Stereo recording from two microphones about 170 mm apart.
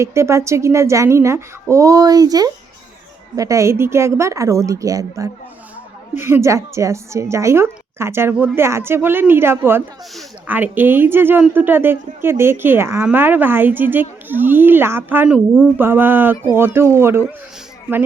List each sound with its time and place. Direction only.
0.0 s speech: 15° right (ahead or behind)